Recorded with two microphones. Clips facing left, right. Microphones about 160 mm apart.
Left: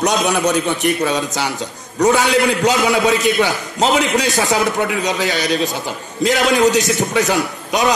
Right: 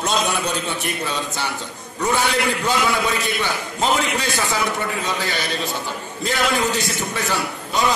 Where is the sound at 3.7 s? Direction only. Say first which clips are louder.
Left 6 dB; 90° left.